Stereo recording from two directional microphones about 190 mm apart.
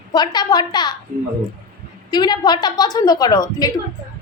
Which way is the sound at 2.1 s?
20° left (ahead or behind).